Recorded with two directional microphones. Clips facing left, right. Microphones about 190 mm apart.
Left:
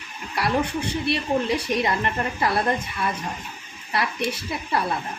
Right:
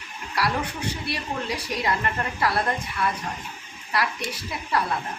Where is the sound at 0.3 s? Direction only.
25° left (ahead or behind).